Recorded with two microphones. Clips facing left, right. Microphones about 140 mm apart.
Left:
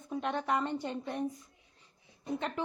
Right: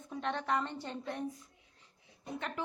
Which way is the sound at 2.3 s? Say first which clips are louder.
Left 3 dB; 25° left (ahead or behind).